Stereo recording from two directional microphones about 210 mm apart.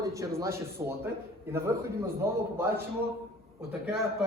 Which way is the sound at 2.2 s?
15° right (ahead or behind).